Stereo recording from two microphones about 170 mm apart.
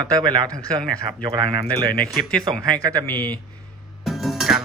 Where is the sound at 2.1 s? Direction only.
Centre (ahead or behind).